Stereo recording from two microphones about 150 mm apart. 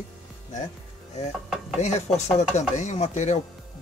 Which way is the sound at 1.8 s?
50° left (ahead or behind).